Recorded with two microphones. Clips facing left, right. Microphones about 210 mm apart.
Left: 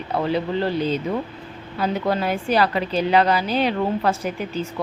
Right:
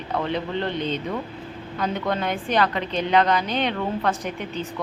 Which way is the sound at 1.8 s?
5° left (ahead or behind).